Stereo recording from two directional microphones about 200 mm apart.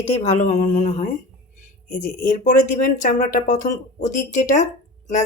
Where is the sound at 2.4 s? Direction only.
40° left (ahead or behind).